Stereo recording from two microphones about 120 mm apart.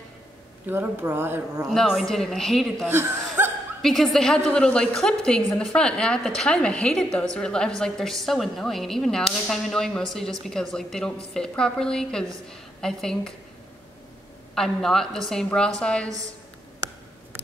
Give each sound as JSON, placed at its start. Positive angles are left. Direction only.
{"t": 0.7, "sound": "a woman's voice", "side_deg": -15}
{"t": 1.7, "sound": "a woman's voice", "side_deg": 0}
{"t": 2.9, "sound": "chuckle", "side_deg": -20}
{"t": 3.8, "sound": "a woman's voice", "side_deg": 5}
{"t": 14.5, "sound": "a woman's voice", "side_deg": 5}